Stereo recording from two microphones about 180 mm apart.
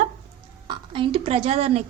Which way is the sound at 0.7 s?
30° right (ahead or behind).